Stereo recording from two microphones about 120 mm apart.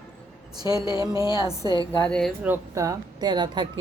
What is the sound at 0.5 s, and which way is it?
A woman's voice, 30° right (ahead or behind).